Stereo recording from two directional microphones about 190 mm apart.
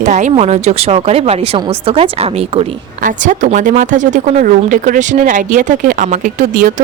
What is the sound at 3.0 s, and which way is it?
Speech, 40° right (ahead or behind).